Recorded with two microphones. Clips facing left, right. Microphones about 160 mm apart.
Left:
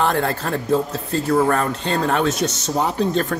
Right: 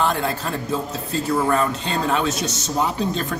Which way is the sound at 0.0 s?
60° left (ahead or behind).